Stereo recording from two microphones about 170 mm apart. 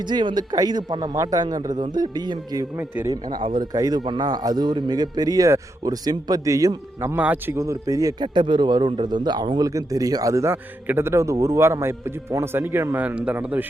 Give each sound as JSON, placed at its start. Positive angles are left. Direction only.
{"t": 0.0, "sound": "a man's voice", "side_deg": -25}